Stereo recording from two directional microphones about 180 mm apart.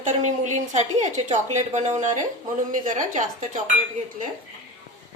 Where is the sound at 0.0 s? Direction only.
45° right (ahead or behind).